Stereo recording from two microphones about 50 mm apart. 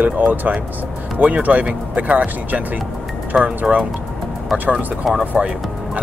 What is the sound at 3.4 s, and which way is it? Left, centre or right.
Speech, right.